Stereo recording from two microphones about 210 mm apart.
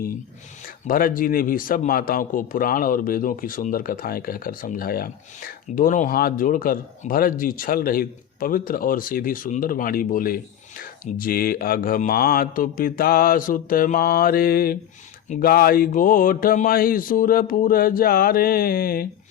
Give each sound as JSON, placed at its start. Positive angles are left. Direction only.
{"t": 0.9, "sound": "speech", "side_deg": 40}